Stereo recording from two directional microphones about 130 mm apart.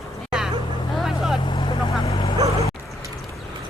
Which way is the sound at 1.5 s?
35° left (ahead or behind).